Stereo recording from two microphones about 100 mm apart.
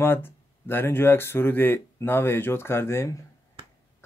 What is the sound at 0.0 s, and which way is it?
Speech, 25° left (ahead or behind).